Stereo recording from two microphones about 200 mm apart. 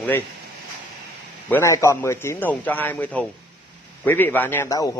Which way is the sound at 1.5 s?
15° left (ahead or behind).